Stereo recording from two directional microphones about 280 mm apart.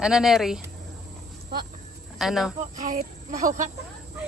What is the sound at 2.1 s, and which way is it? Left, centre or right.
Speech, centre.